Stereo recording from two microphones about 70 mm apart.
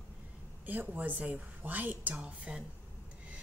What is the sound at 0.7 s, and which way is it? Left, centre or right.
A woman's voice, right.